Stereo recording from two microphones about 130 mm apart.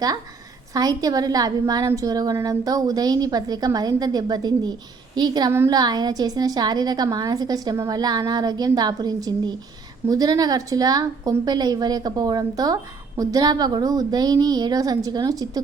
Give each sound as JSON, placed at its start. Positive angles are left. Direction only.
{"t": 0.7, "sound": "a woman's voice", "side_deg": -30}